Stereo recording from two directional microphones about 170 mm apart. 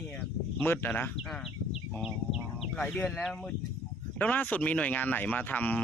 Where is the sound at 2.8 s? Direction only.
5° left (ahead or behind).